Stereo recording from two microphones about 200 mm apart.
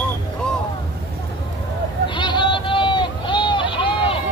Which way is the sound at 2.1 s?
25° left (ahead or behind).